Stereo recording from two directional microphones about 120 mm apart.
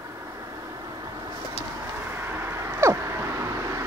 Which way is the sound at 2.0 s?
20° right (ahead or behind).